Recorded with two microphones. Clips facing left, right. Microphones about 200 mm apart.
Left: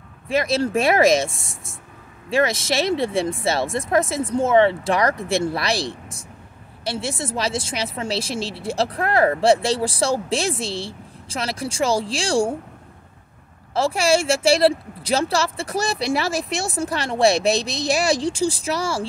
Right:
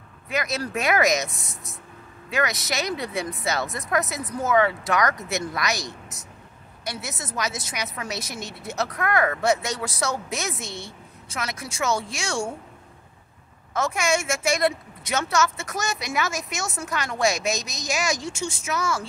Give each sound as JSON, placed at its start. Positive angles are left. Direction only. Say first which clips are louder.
{"t": 0.3, "sound": "a woman's voice", "louder": "left 7 dB", "side_deg": 30}
{"t": 13.7, "sound": "a woman's voice", "louder": "left 5 dB", "side_deg": 30}